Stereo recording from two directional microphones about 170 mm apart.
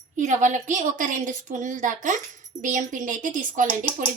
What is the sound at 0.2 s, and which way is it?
A woman's voice, 45° right (ahead or behind).